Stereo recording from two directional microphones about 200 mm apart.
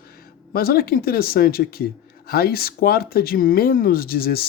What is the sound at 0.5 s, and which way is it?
Speech, 50° left (ahead or behind).